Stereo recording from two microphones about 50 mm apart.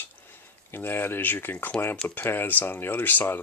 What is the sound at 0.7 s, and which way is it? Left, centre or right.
Speech, left.